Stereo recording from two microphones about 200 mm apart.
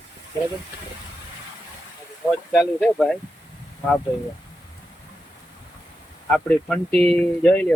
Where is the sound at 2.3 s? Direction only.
5° right (ahead or behind).